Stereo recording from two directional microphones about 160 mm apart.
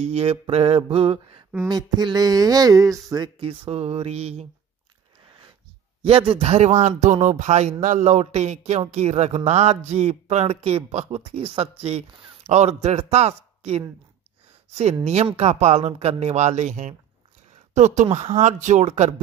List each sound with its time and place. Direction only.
0.0 s mantra: 40° right (ahead or behind)
1.7 s speech: 25° right (ahead or behind); by 4.5 s 40° right (ahead or behind)
6.0 s speech: 35° right (ahead or behind)
15.0 s speech: 40° right (ahead or behind)